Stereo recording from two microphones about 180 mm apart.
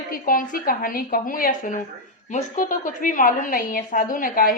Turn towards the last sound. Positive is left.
turn(degrees=50)  # may be behind; listen again after turning